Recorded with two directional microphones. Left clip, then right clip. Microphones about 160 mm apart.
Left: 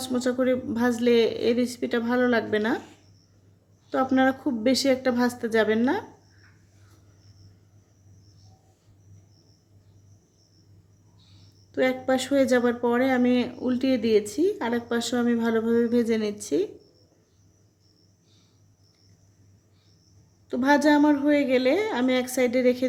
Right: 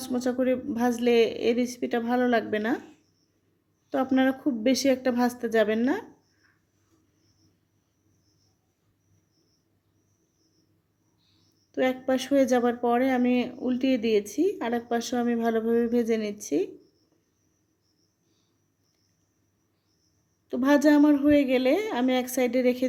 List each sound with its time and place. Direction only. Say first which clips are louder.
0.0 s speech: left 2 dB; 10° right (ahead or behind)
3.8 s speech: left 2 dB; 10° right (ahead or behind)
11.7 s speech: left 2 dB; 10° right (ahead or behind)
20.5 s speech: left 1 dB; 15° right (ahead or behind)